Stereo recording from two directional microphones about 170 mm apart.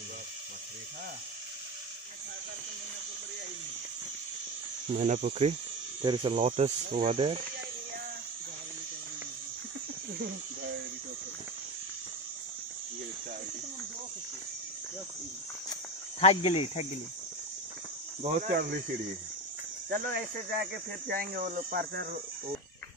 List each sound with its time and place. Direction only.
4.9 s speech: 45° right (ahead or behind)
6.0 s speech: 30° right (ahead or behind)
16.2 s speech: 40° left (ahead or behind)
18.5 s speech: 60° right (ahead or behind)
19.9 s speech: 65° right (ahead or behind)